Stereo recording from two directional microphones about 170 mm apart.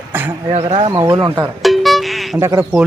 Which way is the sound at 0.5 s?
35° right (ahead or behind).